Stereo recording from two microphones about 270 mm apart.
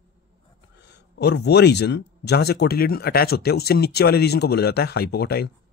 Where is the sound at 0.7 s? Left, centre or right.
Left.